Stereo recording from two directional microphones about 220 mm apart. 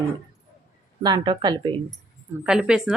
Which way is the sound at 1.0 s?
20° right (ahead or behind).